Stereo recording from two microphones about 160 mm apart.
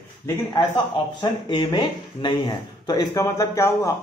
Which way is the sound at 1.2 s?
30° left (ahead or behind).